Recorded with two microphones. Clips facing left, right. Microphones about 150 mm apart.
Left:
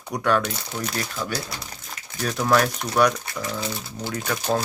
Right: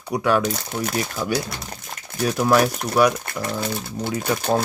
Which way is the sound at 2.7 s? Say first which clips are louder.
Right 2 dB; 55° right (ahead or behind).